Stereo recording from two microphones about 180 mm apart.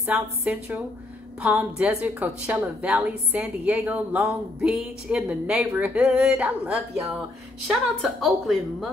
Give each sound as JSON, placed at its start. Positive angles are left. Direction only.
{"t": 0.0, "sound": "a woman's voice", "side_deg": -10}